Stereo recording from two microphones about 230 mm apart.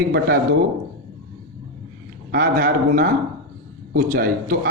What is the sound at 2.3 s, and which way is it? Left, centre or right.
A man's voice, right.